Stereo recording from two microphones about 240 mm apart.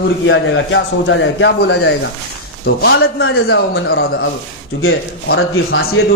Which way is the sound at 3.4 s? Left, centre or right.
Left.